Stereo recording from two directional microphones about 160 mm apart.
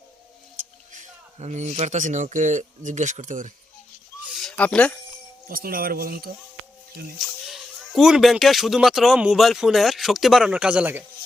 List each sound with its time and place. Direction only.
0.6 s speech: 50° right (ahead or behind)
4.3 s a sound: centre (ahead or behind)
5.5 s speech: 65° right (ahead or behind)
7.2 s speech: centre (ahead or behind)